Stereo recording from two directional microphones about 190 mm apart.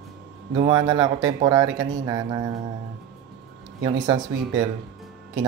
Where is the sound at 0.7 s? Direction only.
20° right (ahead or behind).